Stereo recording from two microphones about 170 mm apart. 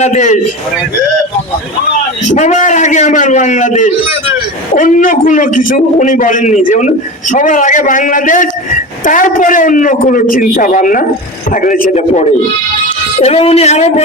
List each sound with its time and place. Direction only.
0.0 s a man's voice: 45° left (ahead or behind)
2.3 s a man's voice: 45° left (ahead or behind)